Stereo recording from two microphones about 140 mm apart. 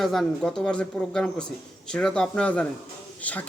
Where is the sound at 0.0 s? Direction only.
Centre (ahead or behind).